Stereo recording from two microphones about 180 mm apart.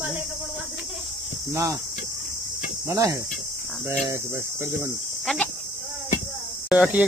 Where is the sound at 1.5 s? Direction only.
15° right (ahead or behind).